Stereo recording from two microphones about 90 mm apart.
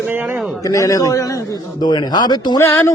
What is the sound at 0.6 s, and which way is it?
A man's voice, 40° left (ahead or behind).